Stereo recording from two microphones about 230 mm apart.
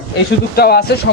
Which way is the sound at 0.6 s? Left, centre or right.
Left.